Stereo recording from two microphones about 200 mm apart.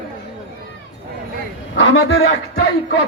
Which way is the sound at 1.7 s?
70° left (ahead or behind).